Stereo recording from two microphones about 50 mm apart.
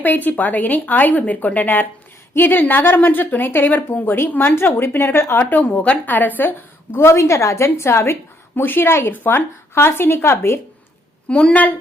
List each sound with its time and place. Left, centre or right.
0.0 s a woman's voice: left
5.4 s a woman's voice: left
5.7 s a woman's voice: left
6.1 s a woman's voice: left
7.0 s a woman's voice: left
9.1 s a woman's voice: left
11.3 s a woman's voice: left